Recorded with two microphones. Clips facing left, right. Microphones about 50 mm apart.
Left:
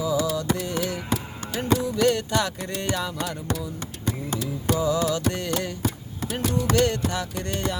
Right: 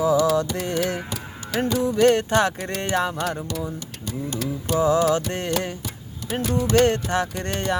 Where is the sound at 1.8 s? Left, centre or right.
Right.